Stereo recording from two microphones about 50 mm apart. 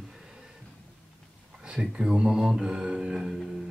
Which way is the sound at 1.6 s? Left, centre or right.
Centre.